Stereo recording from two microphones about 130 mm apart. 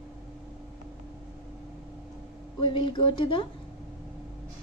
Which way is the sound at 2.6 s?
40° left (ahead or behind).